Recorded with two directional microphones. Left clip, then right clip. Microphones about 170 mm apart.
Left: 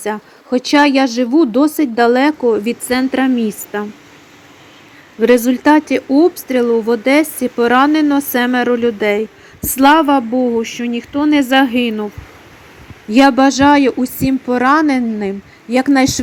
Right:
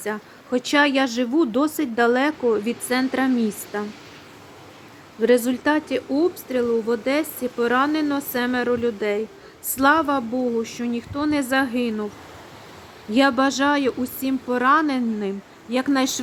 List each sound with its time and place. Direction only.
0.0 s speech: 15° left (ahead or behind)
5.2 s speech: 20° left (ahead or behind)
13.1 s speech: 20° left (ahead or behind)